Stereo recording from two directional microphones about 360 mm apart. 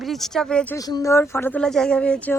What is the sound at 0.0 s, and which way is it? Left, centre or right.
Speech, centre.